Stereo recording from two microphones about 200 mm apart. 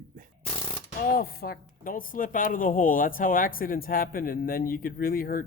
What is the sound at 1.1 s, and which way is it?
A woman's voice, 50° left (ahead or behind).